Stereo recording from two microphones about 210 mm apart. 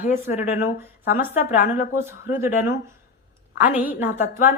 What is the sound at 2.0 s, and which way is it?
Speech, 10° right (ahead or behind).